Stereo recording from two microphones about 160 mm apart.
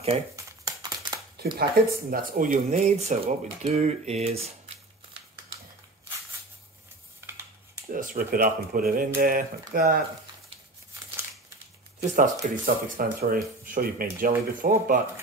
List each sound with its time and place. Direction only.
0.5 s crumpling: 20° right (ahead or behind)
1.6 s speech: 65° right (ahead or behind)
2.7 s speech: 45° right (ahead or behind)
7.9 s speech: 60° right (ahead or behind)
12.2 s speech: 65° right (ahead or behind)